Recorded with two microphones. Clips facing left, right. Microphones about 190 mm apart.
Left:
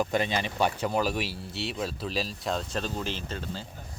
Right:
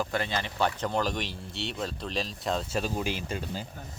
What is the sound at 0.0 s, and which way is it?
Speech, 15° left (ahead or behind).